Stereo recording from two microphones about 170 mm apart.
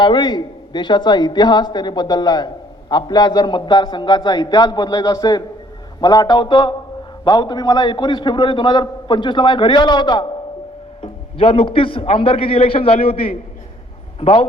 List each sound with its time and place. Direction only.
0.0 s a man's voice: 25° left (ahead or behind)